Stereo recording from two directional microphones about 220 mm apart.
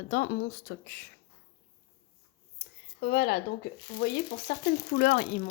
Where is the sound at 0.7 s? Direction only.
50° left (ahead or behind).